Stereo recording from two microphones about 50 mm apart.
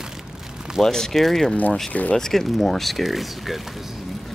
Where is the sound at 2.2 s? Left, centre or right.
Centre.